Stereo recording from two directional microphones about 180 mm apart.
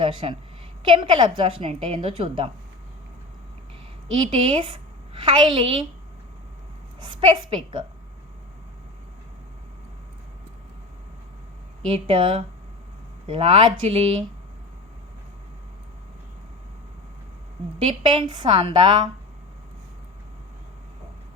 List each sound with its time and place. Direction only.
0.0 s a woman's voice: 30° right (ahead or behind)
4.4 s a woman's voice: 30° right (ahead or behind)
7.0 s a woman's voice: 25° right (ahead or behind)
11.9 s a woman's voice: 30° right (ahead or behind)
17.7 s a woman's voice: 30° right (ahead or behind)